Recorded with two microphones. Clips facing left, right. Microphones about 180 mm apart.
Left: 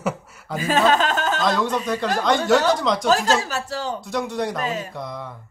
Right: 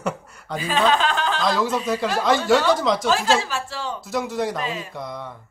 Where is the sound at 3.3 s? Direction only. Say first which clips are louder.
Even; 40° left (ahead or behind).